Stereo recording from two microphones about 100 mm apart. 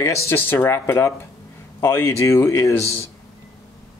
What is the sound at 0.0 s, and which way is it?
Speech, 30° left (ahead or behind).